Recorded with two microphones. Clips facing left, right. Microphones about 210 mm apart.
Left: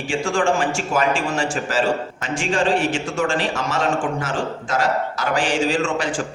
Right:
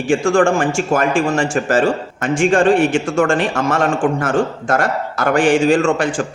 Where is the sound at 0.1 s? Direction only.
50° right (ahead or behind).